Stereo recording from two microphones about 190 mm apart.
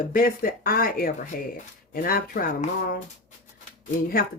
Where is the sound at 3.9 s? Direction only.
50° left (ahead or behind).